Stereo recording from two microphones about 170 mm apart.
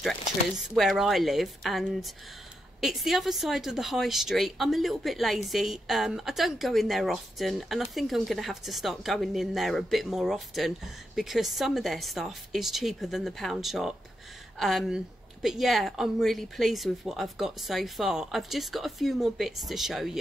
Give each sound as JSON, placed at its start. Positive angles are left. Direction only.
{"t": 0.0, "sound": "a woman's voice", "side_deg": 0}